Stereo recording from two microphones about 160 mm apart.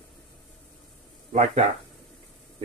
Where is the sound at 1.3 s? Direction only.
45° right (ahead or behind).